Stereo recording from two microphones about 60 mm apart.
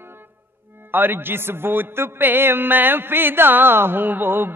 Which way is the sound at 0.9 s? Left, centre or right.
Right.